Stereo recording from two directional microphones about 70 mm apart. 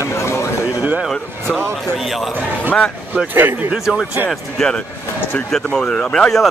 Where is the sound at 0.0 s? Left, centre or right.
Left.